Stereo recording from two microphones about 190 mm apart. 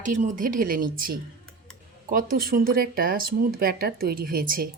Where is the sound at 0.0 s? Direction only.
40° right (ahead or behind).